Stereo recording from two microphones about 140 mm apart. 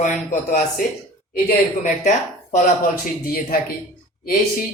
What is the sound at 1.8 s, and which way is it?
Speech, 60° left (ahead or behind).